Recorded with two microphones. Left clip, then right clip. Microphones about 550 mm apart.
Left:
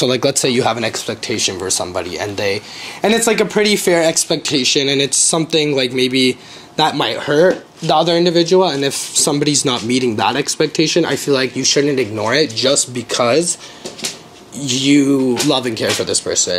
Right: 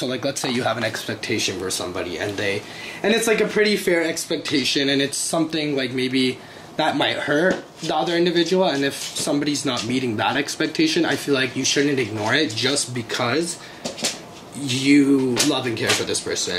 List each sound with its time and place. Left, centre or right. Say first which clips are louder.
0.0 s speech: left 10 dB; left
4.6 s speech: left 6 dB; left
14.7 s speech: left 4 dB; left